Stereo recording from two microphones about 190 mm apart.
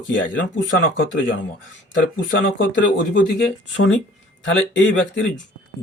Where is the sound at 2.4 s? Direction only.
75° left (ahead or behind).